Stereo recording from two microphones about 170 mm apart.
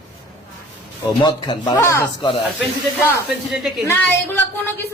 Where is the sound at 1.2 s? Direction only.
25° left (ahead or behind).